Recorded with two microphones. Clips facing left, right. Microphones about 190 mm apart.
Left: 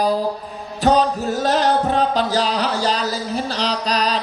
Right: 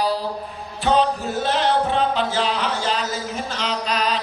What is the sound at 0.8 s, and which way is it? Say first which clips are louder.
Music: left 3 dB; 40° left (ahead or behind).